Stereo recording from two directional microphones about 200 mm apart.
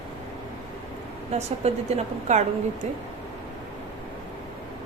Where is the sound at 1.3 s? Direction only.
30° right (ahead or behind).